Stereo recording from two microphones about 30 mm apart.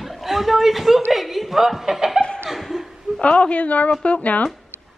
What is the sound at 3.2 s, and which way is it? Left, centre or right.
A woman's voice, left.